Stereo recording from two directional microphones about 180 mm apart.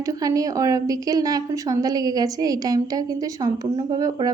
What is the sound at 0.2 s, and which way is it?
A woman's voice, 20° right (ahead or behind).